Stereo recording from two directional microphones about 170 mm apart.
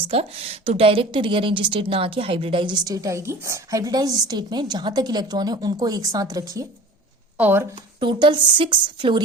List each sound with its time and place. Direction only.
0.1 s a woman's voice: 35° right (ahead or behind); by 7.7 s 10° right (ahead or behind)
7.9 s a woman's voice: 25° right (ahead or behind)